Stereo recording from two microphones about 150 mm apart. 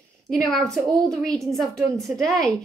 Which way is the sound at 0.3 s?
Centre (ahead or behind).